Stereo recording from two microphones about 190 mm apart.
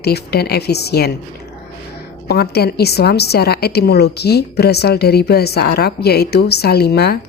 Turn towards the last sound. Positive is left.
turn(degrees=60)  # may be behind; listen again after turning